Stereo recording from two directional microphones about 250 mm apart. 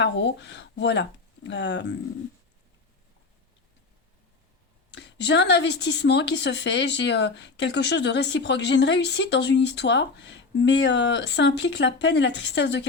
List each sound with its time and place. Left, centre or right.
0.0 s a woman's voice: left
4.9 s a woman's voice: left